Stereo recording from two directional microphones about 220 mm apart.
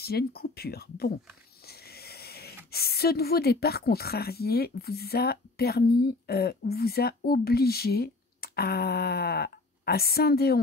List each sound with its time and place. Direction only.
0.0 s speech: 45° left (ahead or behind)